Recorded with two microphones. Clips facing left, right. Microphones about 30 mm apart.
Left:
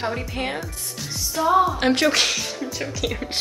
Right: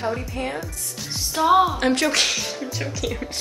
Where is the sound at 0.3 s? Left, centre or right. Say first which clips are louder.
Left 1 dB; left.